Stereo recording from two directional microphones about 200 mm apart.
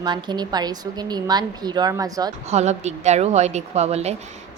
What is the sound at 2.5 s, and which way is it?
A woman's voice, 35° right (ahead or behind).